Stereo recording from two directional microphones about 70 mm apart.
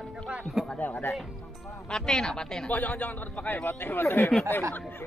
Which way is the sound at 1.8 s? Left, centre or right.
Centre.